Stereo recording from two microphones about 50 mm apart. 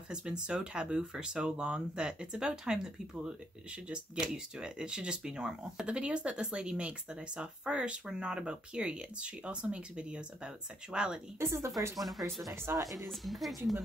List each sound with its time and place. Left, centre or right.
0.1 s speech: centre
11.3 s speech: right
12.0 s a woman's voice: centre